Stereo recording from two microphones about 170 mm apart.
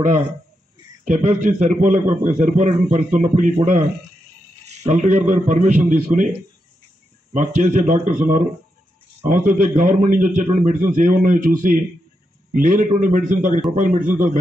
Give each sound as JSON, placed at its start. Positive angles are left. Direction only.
{"t": 1.0, "sound": "a man's voice", "side_deg": -50}
{"t": 4.6, "sound": "a man's voice", "side_deg": -45}
{"t": 7.3, "sound": "a man's voice", "side_deg": -45}